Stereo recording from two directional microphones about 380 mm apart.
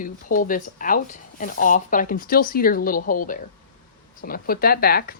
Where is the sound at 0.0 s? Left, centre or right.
Left.